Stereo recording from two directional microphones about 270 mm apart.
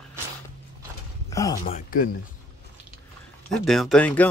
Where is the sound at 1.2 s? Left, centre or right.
Centre.